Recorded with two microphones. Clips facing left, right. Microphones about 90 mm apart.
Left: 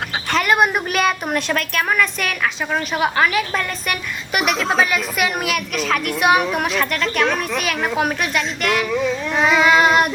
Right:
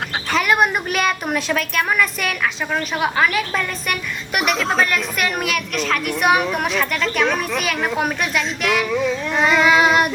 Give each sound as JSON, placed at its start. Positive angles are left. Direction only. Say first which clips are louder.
{"t": 0.3, "sound": "a woman's voice", "louder": "left 1 dB", "side_deg": 0}